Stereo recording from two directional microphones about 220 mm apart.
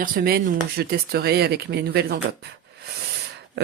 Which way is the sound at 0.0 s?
40° right (ahead or behind).